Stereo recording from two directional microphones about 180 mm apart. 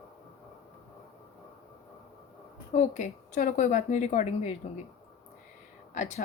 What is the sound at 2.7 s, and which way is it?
A woman's voice, 45° left (ahead or behind).